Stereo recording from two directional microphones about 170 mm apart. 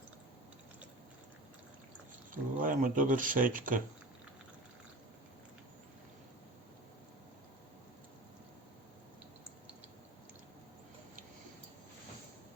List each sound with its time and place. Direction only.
2.3 s speech: 50° right (ahead or behind)